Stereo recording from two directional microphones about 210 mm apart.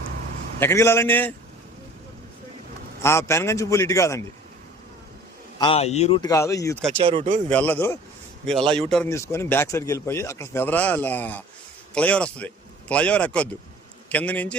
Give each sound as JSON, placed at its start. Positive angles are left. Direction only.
{"t": 0.6, "sound": "speech", "side_deg": 10}
{"t": 3.0, "sound": "speech", "side_deg": 10}
{"t": 5.5, "sound": "speech", "side_deg": 25}
{"t": 6.3, "sound": "speech", "side_deg": 15}
{"t": 7.0, "sound": "speech", "side_deg": -30}
{"t": 7.5, "sound": "a man's voice", "side_deg": 10}